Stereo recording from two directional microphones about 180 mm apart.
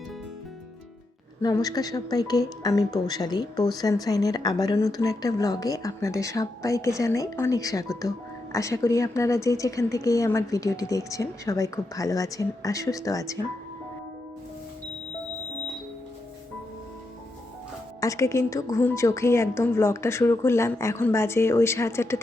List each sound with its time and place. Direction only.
1.4 s speech: 20° left (ahead or behind)
18.0 s speech: 15° left (ahead or behind)